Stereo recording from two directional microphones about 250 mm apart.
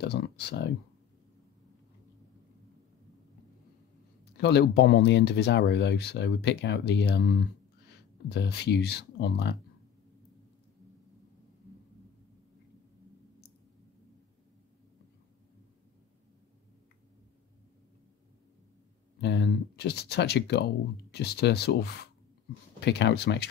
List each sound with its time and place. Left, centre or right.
0.0 s speech: left
4.2 s speech: left
19.2 s speech: left